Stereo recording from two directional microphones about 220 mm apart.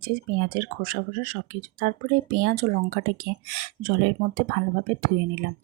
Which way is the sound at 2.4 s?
45° right (ahead or behind).